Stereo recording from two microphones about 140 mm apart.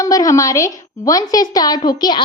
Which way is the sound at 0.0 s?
25° left (ahead or behind).